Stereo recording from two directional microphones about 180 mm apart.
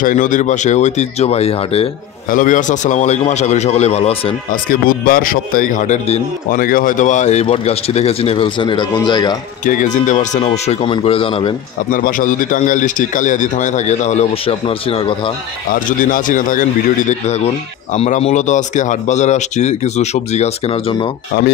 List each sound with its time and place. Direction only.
0.0 s speech: 45° left (ahead or behind)
2.3 s speech: 45° left (ahead or behind)
4.5 s a man's voice: 50° left (ahead or behind)
6.5 s speech: 50° left (ahead or behind); by 9.4 s 25° left (ahead or behind)
10.0 s a man's voice: 45° left (ahead or behind)
11.9 s a man's voice: 50° left (ahead or behind); by 15.3 s 30° left (ahead or behind)
15.7 s a man's voice: 50° left (ahead or behind)
17.9 s speech: 35° left (ahead or behind)